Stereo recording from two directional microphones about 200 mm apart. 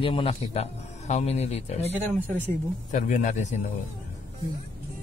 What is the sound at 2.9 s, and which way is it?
Speech, 40° left (ahead or behind).